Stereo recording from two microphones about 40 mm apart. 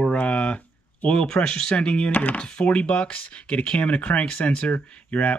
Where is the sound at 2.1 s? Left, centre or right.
Left.